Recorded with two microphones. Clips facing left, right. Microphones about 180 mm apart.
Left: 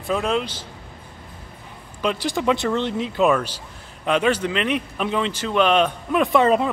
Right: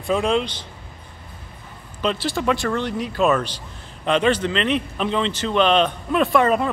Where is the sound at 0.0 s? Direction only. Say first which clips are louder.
Right 2 dB; centre (ahead or behind).